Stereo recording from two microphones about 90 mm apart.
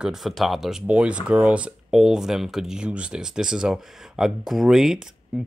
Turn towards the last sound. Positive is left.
turn(degrees=-5)  # may be behind; listen again after turning